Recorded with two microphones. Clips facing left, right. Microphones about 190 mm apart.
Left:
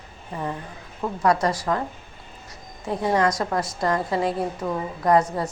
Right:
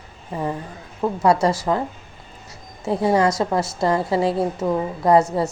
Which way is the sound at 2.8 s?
30° right (ahead or behind).